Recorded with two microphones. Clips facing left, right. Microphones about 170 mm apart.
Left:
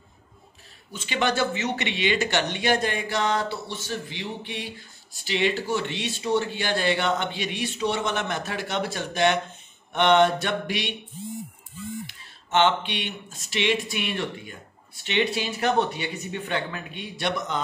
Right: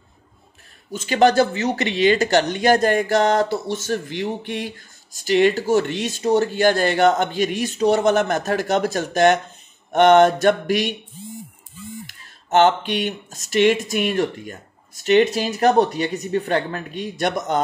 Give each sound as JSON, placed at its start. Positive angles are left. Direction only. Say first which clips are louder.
{"t": 0.9, "sound": "speech", "louder": "right 9 dB", "side_deg": -40}
{"t": 12.1, "sound": "speech", "louder": "right 8 dB", "side_deg": -40}